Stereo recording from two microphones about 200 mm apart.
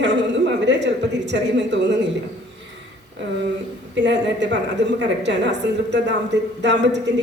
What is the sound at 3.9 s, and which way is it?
A woman's voice, 60° right (ahead or behind).